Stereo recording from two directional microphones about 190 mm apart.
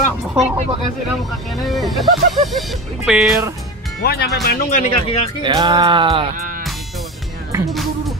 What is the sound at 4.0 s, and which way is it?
Speech, 55° left (ahead or behind).